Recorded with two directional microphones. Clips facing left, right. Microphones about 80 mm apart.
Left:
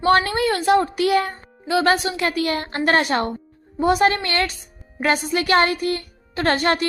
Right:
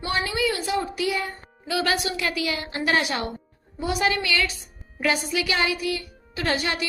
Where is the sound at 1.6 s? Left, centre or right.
Left.